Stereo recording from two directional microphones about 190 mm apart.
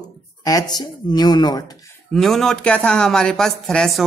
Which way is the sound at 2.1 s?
Centre (ahead or behind).